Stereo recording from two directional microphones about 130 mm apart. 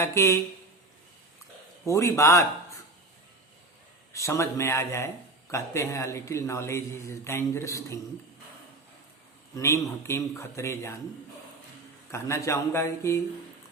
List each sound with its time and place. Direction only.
0.0 s speech: 20° left (ahead or behind)
1.8 s speech: 20° left (ahead or behind)
4.1 s speech: 25° left (ahead or behind)
9.6 s speech: 20° left (ahead or behind)
12.1 s speech: 20° left (ahead or behind)